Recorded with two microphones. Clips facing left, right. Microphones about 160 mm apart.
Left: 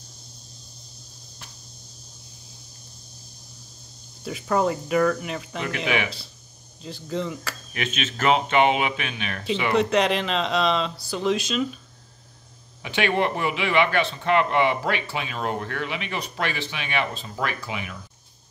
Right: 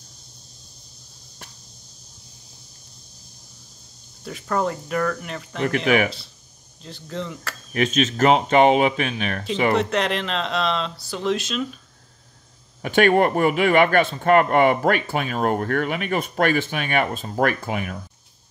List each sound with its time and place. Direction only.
4.2 s speech: 5° left (ahead or behind)
5.9 s a man's voice: 45° right (ahead or behind)
6.8 s speech: 5° left (ahead or behind)
7.7 s speech: 40° right (ahead or behind)
9.8 s speech: centre (ahead or behind)
12.8 s a man's voice: 50° right (ahead or behind)